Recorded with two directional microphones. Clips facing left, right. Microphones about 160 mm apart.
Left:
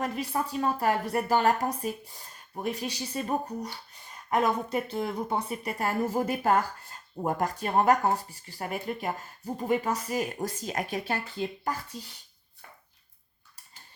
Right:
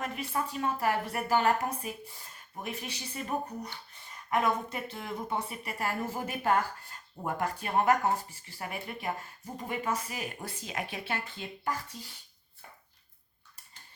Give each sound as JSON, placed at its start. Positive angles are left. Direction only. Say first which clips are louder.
{"t": 0.0, "sound": "speech", "louder": "left 4 dB", "side_deg": 35}